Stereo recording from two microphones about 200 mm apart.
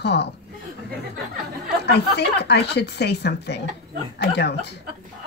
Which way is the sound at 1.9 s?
55° left (ahead or behind).